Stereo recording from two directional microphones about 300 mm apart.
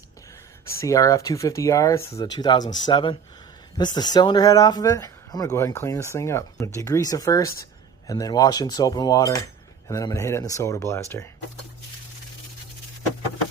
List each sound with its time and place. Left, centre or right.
0.7 s speech: centre